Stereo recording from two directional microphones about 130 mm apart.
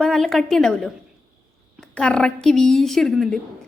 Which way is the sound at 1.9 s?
5° left (ahead or behind).